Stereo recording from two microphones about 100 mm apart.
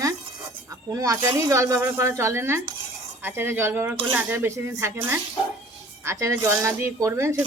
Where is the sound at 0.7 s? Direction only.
35° right (ahead or behind).